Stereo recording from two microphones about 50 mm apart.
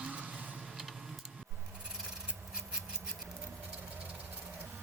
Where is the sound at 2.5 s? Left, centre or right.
Centre.